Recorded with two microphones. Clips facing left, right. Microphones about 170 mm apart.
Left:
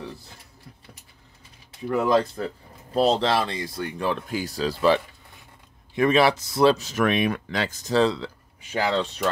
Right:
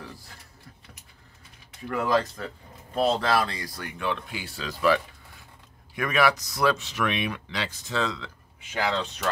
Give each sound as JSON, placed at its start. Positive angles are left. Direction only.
{"t": 1.9, "sound": "speech", "side_deg": 20}
{"t": 4.0, "sound": "speech", "side_deg": 40}
{"t": 6.8, "sound": "speech", "side_deg": 45}